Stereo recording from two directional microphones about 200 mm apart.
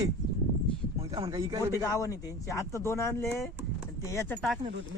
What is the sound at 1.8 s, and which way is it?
Speech, 15° left (ahead or behind).